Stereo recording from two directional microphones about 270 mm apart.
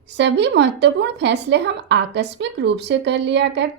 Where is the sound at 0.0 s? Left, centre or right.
Right.